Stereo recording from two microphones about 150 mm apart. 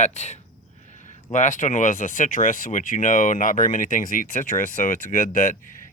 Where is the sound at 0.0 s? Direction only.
50° left (ahead or behind).